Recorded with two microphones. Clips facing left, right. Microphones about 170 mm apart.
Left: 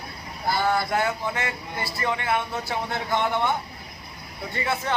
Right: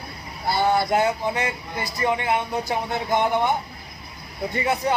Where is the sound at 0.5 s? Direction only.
20° right (ahead or behind).